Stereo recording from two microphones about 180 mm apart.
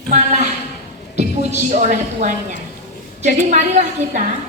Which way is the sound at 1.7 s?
45° right (ahead or behind).